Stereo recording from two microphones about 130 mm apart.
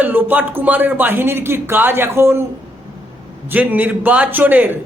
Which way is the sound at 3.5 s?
15° right (ahead or behind).